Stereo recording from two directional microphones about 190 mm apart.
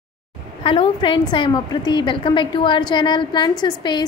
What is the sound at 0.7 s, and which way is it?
A woman's voice, 25° left (ahead or behind).